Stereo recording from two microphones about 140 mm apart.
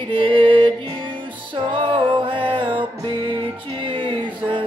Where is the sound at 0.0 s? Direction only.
35° right (ahead or behind).